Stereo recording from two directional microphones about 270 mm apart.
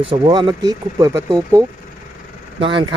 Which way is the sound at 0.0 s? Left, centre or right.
Centre.